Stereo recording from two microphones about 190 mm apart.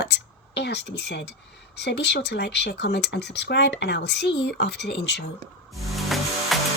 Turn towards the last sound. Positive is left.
turn(degrees=0)  # may be behind; listen again after turning